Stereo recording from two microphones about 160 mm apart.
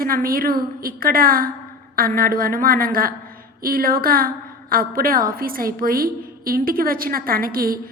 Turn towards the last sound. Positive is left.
turn(degrees=-65)  # may be behind; listen again after turning